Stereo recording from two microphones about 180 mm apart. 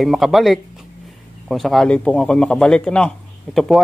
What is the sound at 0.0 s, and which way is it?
Speech, centre (ahead or behind).